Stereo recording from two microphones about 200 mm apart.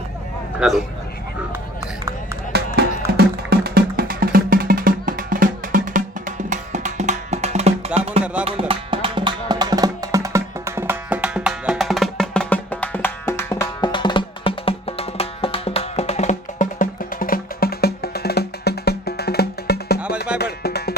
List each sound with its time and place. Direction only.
0.6 s speech: centre (ahead or behind)
2.5 s music: 55° right (ahead or behind); by 8.2 s 30° right (ahead or behind)
8.2 s music: 5° right (ahead or behind)
8.4 s music: 30° right (ahead or behind); by 20.9 s 50° left (ahead or behind)